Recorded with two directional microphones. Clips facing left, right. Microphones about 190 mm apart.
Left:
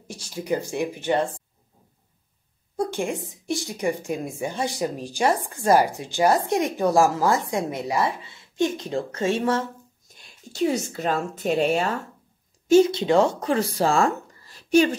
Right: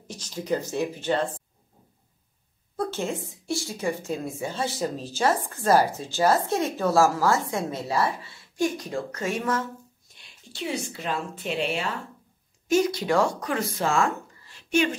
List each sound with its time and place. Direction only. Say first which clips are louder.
0.1 s speech: left 1 dB; 10° left (ahead or behind)
2.7 s speech: left 3 dB; 15° left (ahead or behind)
10.1 s a woman's voice: left 9 dB; 45° left (ahead or behind)
12.6 s speech: left 6 dB; 30° left (ahead or behind)